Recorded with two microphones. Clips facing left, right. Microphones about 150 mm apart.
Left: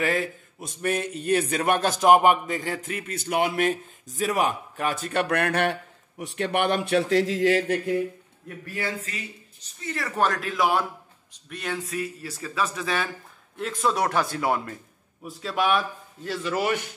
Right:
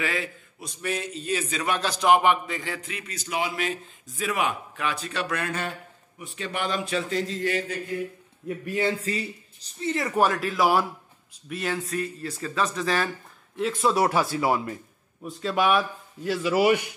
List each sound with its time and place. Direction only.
0.0 s a man's voice: 45° left (ahead or behind); by 7.8 s 80° left
8.6 s a man's voice: 25° right (ahead or behind)
10.1 s speech: 5° right (ahead or behind)